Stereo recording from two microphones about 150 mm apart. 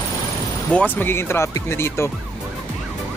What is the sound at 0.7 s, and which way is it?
Speech, 10° left (ahead or behind).